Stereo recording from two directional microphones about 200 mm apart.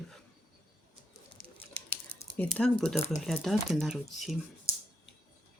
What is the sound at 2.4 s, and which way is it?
Speech, 5° left (ahead or behind).